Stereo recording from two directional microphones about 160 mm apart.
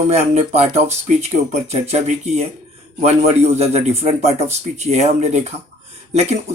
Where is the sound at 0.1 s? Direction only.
40° right (ahead or behind).